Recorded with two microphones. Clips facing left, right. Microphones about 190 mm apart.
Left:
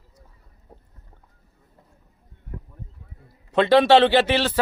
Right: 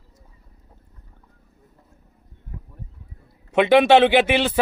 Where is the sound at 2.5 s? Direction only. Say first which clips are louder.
Left 3 dB; 55° left (ahead or behind).